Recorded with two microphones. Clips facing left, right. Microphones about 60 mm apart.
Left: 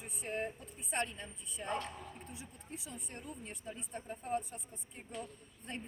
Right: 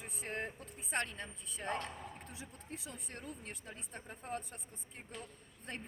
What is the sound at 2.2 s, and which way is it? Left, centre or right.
Speech, right.